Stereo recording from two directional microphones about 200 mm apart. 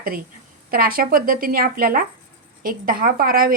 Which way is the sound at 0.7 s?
45° right (ahead or behind).